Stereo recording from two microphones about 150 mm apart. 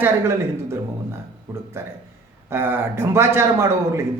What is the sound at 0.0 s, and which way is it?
A man's voice, 15° right (ahead or behind).